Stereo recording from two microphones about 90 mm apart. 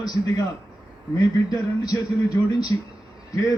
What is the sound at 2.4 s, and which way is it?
Speech, 30° left (ahead or behind).